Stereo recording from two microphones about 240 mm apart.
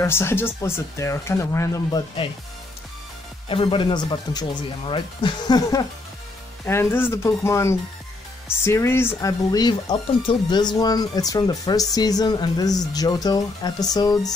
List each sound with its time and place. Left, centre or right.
0.0 s speech: centre
3.4 s speech: left